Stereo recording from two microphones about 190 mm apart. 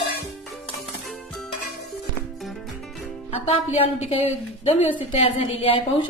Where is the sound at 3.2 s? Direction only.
30° left (ahead or behind).